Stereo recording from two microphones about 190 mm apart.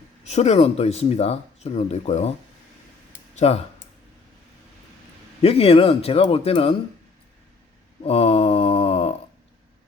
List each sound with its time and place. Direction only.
0.3 s speech: 35° left (ahead or behind)
3.3 s speech: 35° left (ahead or behind)
5.4 s speech: 30° left (ahead or behind)
8.0 s a sound: 30° left (ahead or behind)